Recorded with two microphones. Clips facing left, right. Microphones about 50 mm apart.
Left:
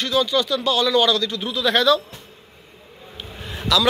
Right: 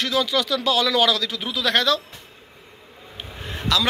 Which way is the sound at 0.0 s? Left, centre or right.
Right.